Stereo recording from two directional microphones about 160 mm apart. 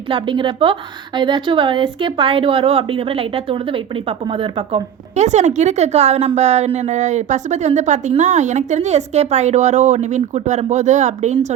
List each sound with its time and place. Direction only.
0.1 s a woman's voice: 30° right (ahead or behind); by 11.5 s 45° right (ahead or behind)